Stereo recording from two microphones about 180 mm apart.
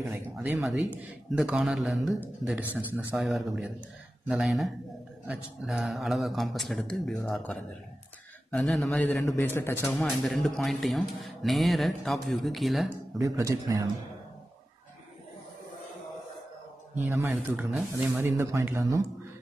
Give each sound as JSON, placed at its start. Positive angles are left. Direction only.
{"t": 0.6, "sound": "a man's voice", "side_deg": 0}
{"t": 9.2, "sound": "a man's voice", "side_deg": 20}
{"t": 13.2, "sound": "speech", "side_deg": -20}
{"t": 17.0, "sound": "speech", "side_deg": -15}